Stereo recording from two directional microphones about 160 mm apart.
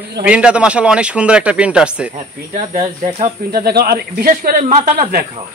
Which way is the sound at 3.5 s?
75° right (ahead or behind).